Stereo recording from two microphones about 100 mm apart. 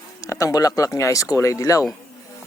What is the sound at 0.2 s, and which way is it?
Speech, 35° left (ahead or behind).